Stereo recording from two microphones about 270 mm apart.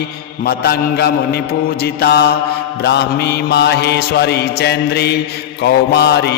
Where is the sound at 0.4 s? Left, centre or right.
Left.